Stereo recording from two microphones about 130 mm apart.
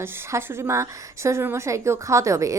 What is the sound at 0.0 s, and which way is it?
A woman's voice, 20° right (ahead or behind).